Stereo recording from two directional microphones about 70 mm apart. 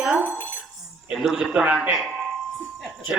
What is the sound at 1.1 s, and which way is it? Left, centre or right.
A man's voice, centre.